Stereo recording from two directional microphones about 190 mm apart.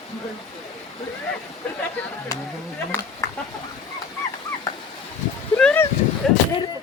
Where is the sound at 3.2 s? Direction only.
15° left (ahead or behind).